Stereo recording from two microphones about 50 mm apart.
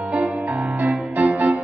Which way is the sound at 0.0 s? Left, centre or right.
Right.